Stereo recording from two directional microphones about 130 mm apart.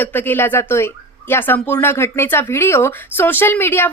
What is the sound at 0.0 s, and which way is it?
Speech, 15° left (ahead or behind).